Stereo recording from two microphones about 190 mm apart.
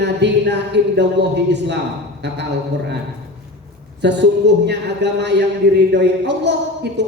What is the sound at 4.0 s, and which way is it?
A man's voice, 65° right (ahead or behind).